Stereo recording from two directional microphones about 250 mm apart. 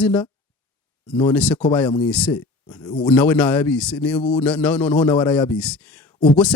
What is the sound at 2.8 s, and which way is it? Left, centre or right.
Speech, centre.